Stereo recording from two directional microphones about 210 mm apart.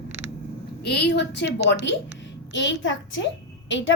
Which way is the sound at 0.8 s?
50° left (ahead or behind).